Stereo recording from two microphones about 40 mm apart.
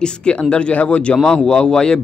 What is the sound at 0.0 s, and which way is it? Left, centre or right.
A man's voice, left.